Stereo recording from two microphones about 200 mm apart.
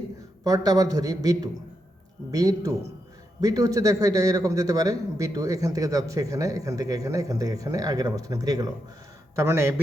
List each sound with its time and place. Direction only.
0.4 s a man's voice: 20° right (ahead or behind)